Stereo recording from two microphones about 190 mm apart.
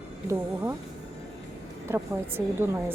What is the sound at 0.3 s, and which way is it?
Speech, 15° right (ahead or behind).